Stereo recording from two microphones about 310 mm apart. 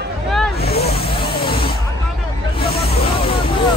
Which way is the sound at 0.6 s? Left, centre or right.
Left.